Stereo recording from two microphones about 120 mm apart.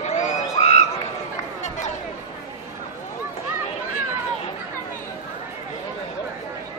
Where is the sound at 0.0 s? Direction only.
75° left (ahead or behind).